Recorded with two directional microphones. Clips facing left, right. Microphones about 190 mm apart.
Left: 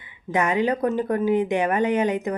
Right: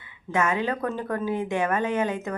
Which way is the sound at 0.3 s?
15° left (ahead or behind).